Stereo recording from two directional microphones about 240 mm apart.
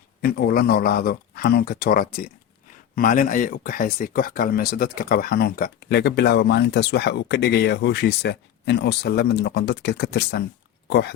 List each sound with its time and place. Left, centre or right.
0.2 s speech: left